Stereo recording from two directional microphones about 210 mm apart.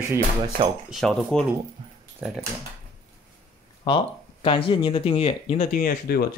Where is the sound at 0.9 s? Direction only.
Centre (ahead or behind).